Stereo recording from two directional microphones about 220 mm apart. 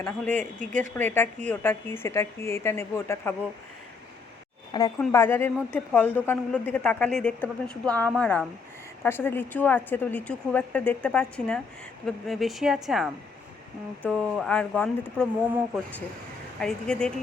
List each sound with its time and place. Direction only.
0.0 s a woman's voice: 5° left (ahead or behind)
0.6 s speech: 35° right (ahead or behind)
0.9 s a woman's voice: 10° left (ahead or behind)
4.9 s a woman's voice: 10° left (ahead or behind)
16.6 s speech: 5° left (ahead or behind)